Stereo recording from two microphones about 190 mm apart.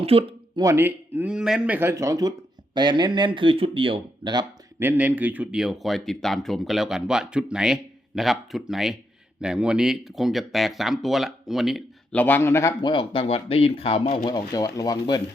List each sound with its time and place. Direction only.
0.0 s a sound: 30° right (ahead or behind)
0.6 s speech: 15° right (ahead or behind)
4.8 s speech: 10° right (ahead or behind); by 12.9 s 15° left (ahead or behind)
12.9 s speech: 25° left (ahead or behind)